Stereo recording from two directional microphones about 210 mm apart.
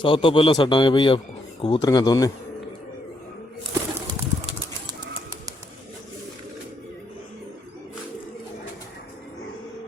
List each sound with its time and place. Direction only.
0.0 s a man's voice: 25° left (ahead or behind)
4.0 s bird flight: 20° right (ahead or behind)